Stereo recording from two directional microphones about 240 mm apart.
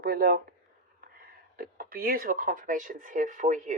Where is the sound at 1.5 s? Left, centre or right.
Right.